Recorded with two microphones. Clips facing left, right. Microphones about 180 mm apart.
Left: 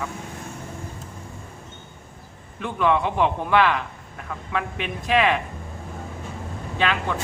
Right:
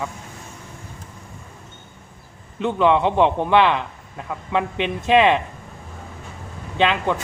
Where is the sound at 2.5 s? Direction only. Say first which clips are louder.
Right 4 dB; 20° right (ahead or behind).